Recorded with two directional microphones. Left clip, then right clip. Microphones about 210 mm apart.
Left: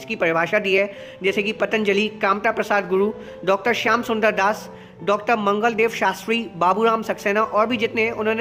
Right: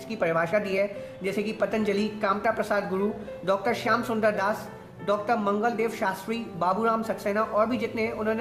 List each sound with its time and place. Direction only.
0.1 s speech: 35° left (ahead or behind)